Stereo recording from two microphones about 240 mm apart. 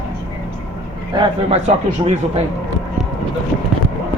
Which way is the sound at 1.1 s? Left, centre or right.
Right.